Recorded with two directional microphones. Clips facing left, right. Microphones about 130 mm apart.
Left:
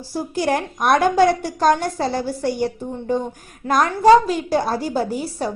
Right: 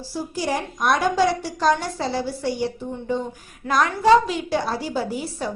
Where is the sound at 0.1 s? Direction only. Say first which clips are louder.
Left 5 dB; 55° left (ahead or behind).